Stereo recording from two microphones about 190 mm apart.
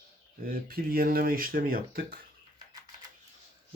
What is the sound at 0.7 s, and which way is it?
Speech, 50° right (ahead or behind).